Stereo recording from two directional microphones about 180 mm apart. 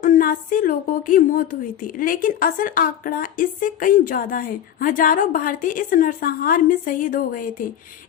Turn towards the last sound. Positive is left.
turn(degrees=50)  # may be behind; listen again after turning